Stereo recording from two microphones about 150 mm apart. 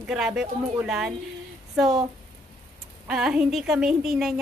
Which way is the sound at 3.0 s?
5° right (ahead or behind).